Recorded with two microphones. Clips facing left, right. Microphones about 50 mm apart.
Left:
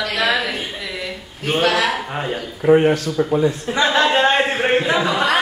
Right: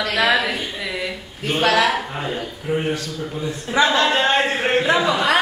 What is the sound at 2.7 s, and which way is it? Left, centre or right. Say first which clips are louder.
Speech: left 4 dB; left.